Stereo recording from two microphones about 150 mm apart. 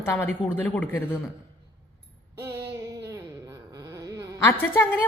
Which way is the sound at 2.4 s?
20° right (ahead or behind).